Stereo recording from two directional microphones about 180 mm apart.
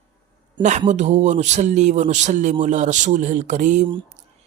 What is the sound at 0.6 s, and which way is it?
A man's voice, 40° right (ahead or behind).